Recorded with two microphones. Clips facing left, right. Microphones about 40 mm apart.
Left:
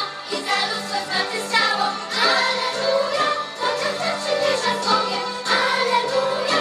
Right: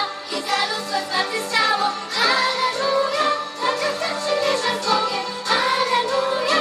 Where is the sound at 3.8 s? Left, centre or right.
Left.